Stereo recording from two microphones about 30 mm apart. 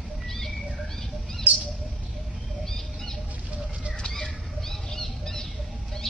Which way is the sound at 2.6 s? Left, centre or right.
Centre.